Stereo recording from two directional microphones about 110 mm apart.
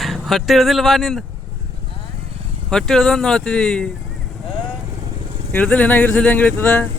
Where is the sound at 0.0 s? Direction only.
Centre (ahead or behind).